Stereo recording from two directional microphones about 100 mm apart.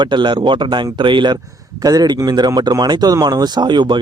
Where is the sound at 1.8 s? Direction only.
40° right (ahead or behind).